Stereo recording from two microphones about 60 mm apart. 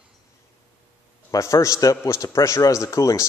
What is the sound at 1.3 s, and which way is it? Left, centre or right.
Speech, left.